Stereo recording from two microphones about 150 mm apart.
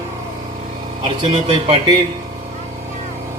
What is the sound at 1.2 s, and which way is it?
Speech, 35° right (ahead or behind).